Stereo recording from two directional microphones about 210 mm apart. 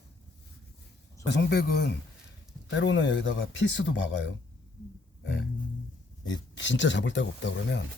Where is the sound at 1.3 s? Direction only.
55° left (ahead or behind).